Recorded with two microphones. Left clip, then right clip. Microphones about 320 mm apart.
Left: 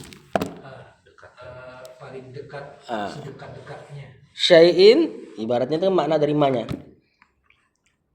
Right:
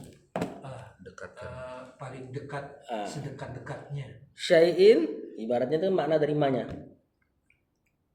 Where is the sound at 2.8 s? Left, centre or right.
Left.